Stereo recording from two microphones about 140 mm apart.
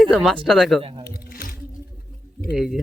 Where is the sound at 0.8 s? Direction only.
45° right (ahead or behind).